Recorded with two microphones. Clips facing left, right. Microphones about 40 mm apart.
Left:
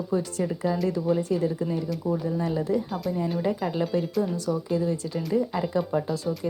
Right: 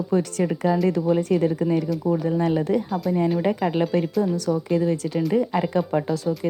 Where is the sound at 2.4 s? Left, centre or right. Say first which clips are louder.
Right 4 dB; right.